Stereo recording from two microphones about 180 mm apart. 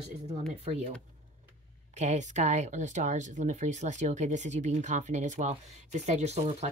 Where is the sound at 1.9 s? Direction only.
40° right (ahead or behind).